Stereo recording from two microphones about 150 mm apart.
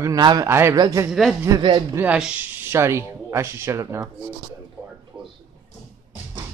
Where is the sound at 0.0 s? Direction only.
25° right (ahead or behind).